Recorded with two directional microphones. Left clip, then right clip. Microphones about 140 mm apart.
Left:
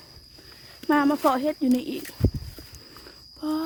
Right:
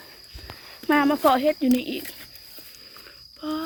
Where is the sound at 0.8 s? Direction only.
20° left (ahead or behind).